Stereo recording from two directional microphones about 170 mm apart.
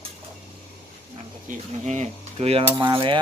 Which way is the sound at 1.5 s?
45° right (ahead or behind).